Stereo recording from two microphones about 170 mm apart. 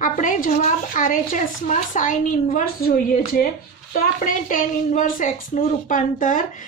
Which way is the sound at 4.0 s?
50° left (ahead or behind).